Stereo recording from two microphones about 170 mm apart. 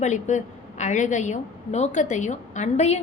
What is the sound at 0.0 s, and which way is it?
A woman's voice, 45° left (ahead or behind).